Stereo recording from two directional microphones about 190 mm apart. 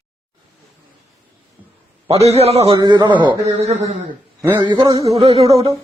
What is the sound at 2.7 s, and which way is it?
Music, 20° right (ahead or behind).